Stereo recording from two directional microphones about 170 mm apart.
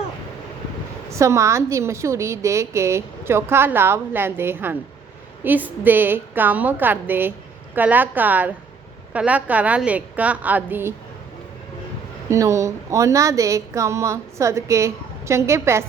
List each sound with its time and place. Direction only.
1.2 s a woman's voice: 15° right (ahead or behind)
12.3 s a woman's voice: 15° right (ahead or behind)